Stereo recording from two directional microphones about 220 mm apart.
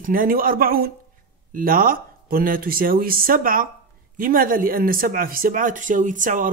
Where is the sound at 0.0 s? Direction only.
40° right (ahead or behind).